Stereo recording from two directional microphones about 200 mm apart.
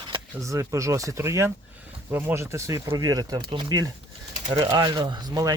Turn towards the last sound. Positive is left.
turn(degrees=-20)  # may be behind; listen again after turning